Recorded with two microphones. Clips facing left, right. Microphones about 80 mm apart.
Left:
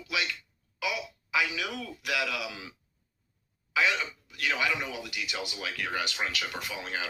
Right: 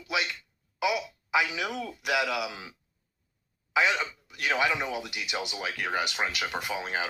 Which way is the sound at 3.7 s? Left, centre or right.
Right.